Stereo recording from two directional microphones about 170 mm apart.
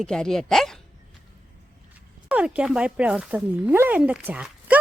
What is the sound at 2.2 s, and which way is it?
Speech, 5° right (ahead or behind).